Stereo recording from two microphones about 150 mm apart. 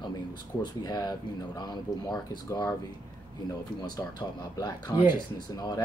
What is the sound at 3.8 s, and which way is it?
Speech, 25° left (ahead or behind).